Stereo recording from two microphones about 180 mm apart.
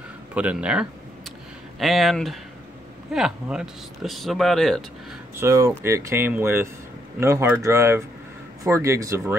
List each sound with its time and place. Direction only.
0.3 s speech: 5° right (ahead or behind)
5.3 s speech: 15° right (ahead or behind)